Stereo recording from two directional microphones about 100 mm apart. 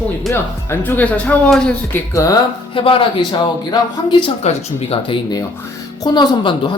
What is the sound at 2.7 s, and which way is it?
Speech, 60° left (ahead or behind).